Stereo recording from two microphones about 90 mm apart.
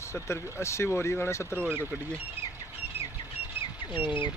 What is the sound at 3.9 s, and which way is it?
Speech, 20° right (ahead or behind).